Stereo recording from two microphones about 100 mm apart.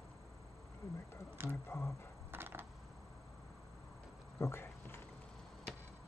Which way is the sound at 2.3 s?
20° right (ahead or behind).